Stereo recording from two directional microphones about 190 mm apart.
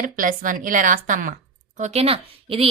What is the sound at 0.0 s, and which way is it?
A woman's voice, 45° right (ahead or behind).